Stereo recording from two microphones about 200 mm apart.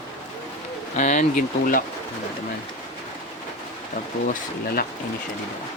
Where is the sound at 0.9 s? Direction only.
40° left (ahead or behind).